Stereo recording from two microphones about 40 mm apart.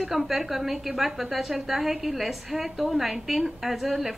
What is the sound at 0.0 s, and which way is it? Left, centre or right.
A woman's voice, centre.